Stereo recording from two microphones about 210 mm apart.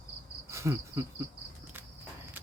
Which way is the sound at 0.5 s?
15° right (ahead or behind).